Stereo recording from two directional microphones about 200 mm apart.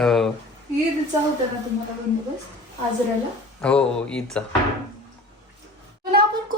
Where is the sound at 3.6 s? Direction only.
5° left (ahead or behind).